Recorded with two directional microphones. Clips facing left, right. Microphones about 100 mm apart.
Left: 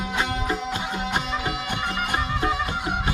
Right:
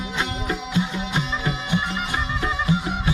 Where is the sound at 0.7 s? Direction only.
50° left (ahead or behind).